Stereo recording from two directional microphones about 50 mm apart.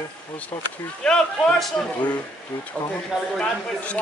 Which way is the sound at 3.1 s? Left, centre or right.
Centre.